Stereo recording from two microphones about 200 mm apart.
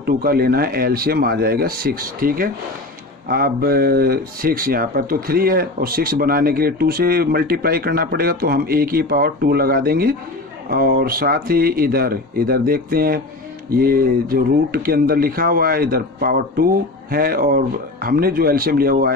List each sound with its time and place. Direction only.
0.0 s speech: 50° right (ahead or behind)